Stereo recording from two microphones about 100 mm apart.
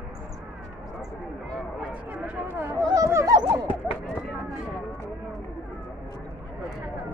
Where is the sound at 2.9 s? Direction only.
35° right (ahead or behind).